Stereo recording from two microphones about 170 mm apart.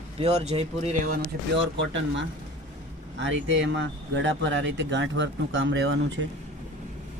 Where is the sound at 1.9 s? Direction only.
90° right.